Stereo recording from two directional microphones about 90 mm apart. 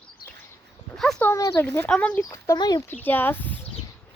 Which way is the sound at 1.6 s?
25° left (ahead or behind).